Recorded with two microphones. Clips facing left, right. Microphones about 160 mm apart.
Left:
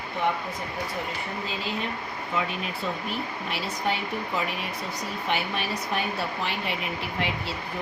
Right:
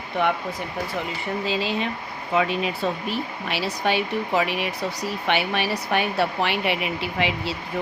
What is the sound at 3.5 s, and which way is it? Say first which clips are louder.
Speech: right 6 dB; 80° right.